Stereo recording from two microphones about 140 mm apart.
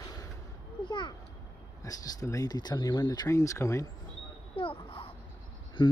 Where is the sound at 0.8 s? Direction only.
35° left (ahead or behind).